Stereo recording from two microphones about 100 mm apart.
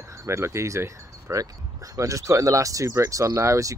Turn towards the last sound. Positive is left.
turn(degrees=-30)  # may be behind; listen again after turning